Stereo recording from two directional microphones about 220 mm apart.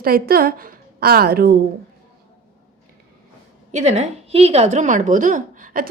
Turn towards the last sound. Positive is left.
turn(degrees=-35)  # may be behind; listen again after turning